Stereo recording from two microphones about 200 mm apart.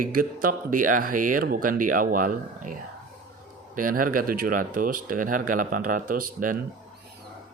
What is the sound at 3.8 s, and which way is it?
Speech, 45° right (ahead or behind).